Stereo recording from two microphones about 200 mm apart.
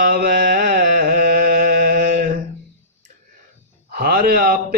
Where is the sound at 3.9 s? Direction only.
45° right (ahead or behind).